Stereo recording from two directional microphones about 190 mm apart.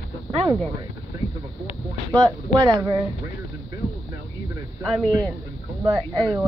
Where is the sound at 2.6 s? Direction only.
20° right (ahead or behind).